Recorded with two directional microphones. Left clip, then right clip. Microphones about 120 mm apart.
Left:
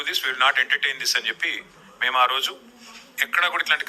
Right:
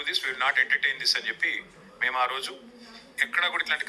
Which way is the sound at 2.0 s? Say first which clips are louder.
Left 6 dB; 20° left (ahead or behind).